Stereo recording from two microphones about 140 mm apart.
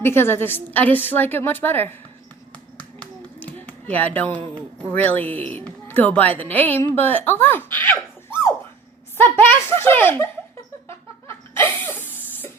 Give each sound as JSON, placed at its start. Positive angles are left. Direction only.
{"t": 0.0, "sound": "a woman's voice", "side_deg": 15}
{"t": 2.7, "sound": "a sound", "side_deg": 10}
{"t": 4.9, "sound": "a woman's voice", "side_deg": 15}
{"t": 10.8, "sound": "laughter", "side_deg": 20}